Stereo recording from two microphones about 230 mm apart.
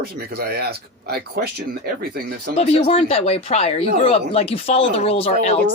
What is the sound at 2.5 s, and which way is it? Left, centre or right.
Speech, left.